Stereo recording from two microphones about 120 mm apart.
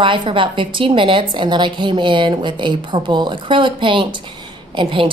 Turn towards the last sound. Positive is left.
turn(degrees=-45)  # may be behind; listen again after turning